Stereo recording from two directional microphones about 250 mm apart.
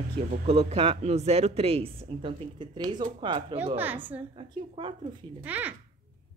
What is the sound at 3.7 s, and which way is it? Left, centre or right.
Speech, centre.